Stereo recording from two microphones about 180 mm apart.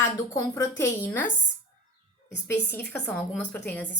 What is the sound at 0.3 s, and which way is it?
Speech, 15° left (ahead or behind).